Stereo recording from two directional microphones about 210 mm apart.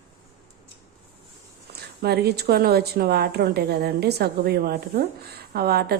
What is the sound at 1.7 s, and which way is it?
A woman's voice, 50° right (ahead or behind).